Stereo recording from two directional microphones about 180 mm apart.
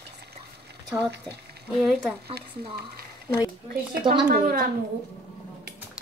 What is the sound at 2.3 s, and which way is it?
Speech, 60° right (ahead or behind).